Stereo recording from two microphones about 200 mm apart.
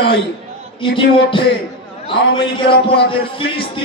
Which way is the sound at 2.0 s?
25° left (ahead or behind).